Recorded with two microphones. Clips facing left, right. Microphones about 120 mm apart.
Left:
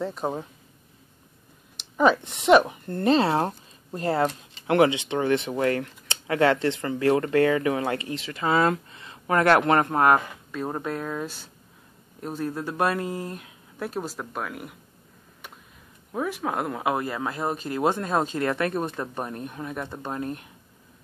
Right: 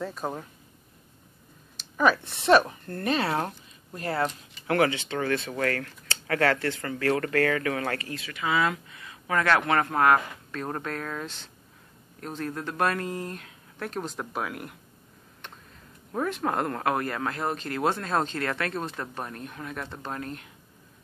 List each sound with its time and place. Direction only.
0.0 s speech: 20° left (ahead or behind)
1.8 s speech: 20° left (ahead or behind)
3.0 s speech: 30° left (ahead or behind)
8.4 s speech: 40° left (ahead or behind)
8.9 s speech: 30° left (ahead or behind)
10.5 s speech: 10° left (ahead or behind)
16.1 s speech: 5° left (ahead or behind)